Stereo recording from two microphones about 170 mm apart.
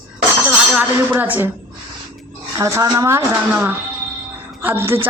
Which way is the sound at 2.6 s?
20° right (ahead or behind).